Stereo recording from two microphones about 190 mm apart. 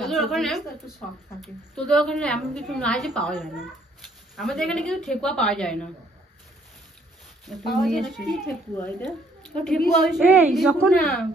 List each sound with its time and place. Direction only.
0.0 s a woman's voice: centre (ahead or behind)
7.4 s a woman's voice: centre (ahead or behind)